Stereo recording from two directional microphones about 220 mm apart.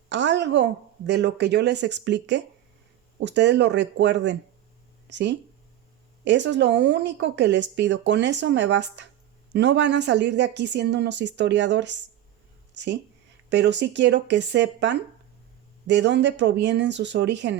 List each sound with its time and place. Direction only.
0.1 s speech: 55° right (ahead or behind)